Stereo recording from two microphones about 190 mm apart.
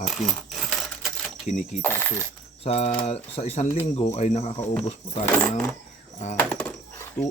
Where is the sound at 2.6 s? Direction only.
35° left (ahead or behind).